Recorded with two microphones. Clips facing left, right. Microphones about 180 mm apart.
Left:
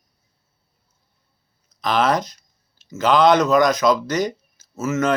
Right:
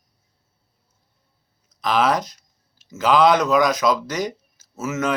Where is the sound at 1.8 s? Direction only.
5° right (ahead or behind).